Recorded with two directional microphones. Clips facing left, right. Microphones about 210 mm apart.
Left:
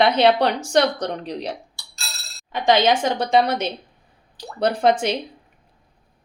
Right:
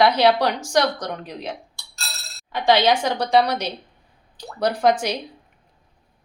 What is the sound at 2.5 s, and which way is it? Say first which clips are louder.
A woman's voice: even; 20° left (ahead or behind).